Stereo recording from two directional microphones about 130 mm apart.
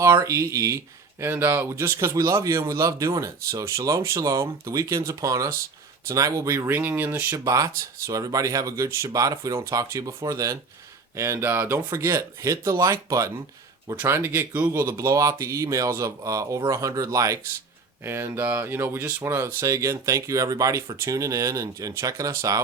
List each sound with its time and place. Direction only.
0.0 s speech: 25° right (ahead or behind)